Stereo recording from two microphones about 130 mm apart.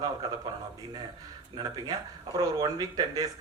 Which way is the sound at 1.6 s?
30° right (ahead or behind).